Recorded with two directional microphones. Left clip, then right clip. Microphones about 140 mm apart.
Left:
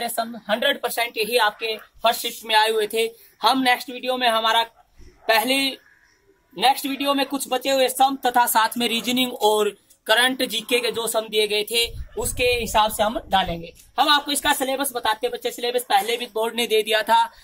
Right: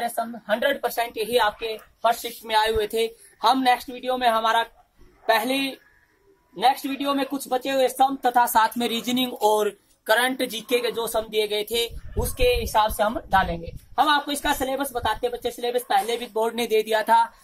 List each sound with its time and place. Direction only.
0.0 s speech: 10° right (ahead or behind)
12.4 s speech: centre (ahead or behind); by 17.3 s 20° right (ahead or behind)